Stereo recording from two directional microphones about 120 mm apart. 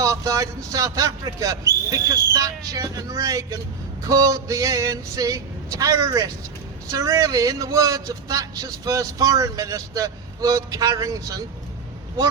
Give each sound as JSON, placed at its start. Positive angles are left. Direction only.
{"t": 0.0, "sound": "speech", "side_deg": -25}